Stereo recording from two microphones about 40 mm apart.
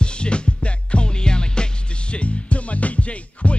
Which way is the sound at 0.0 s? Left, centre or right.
Left.